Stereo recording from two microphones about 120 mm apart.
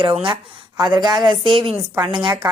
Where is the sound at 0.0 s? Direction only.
45° right (ahead or behind).